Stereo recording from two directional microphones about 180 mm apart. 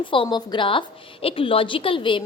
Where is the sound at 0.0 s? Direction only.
30° left (ahead or behind).